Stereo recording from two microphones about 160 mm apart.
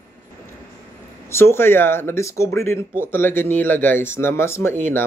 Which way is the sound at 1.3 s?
15° left (ahead or behind).